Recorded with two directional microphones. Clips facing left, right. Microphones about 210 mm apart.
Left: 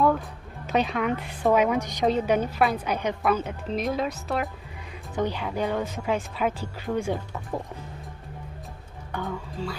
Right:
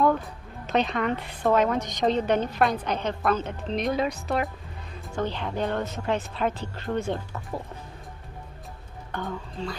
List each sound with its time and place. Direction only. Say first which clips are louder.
0.7 s a woman's voice: even; 10° left (ahead or behind)
5.1 s a woman's voice: left 2 dB; 10° left (ahead or behind)
9.1 s a woman's voice: left 1 dB; 5° left (ahead or behind)